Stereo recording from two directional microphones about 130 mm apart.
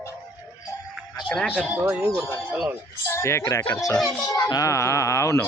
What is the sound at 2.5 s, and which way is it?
Speech, 10° right (ahead or behind).